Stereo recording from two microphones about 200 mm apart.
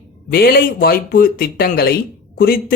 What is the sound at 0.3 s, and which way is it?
Speech, 50° left (ahead or behind).